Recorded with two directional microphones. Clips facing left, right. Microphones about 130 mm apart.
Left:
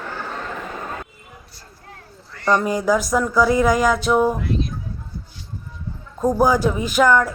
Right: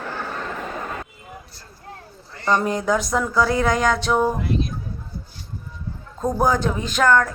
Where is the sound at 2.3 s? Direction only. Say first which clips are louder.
Left 2 dB; 20° right (ahead or behind).